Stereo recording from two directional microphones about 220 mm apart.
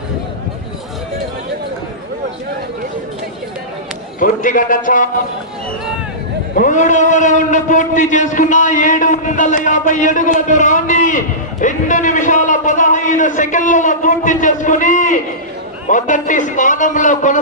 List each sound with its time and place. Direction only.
4.2 s a man's voice: 35° left (ahead or behind)
6.6 s a man's voice: 35° left (ahead or behind)